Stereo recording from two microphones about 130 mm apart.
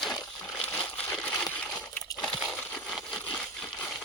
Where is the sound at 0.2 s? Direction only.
25° left (ahead or behind).